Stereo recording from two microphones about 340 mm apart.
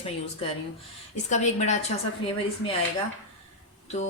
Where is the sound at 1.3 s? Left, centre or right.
Left.